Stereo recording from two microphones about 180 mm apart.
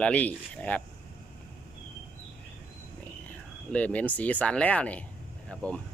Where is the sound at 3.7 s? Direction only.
10° left (ahead or behind).